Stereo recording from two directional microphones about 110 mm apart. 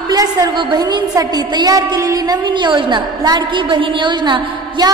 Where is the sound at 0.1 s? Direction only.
35° right (ahead or behind).